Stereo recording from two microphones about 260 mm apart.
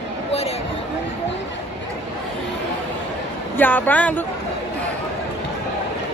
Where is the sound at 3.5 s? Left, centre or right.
Centre.